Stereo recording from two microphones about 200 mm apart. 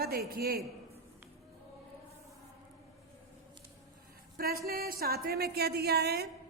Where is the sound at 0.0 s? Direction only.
50° right (ahead or behind).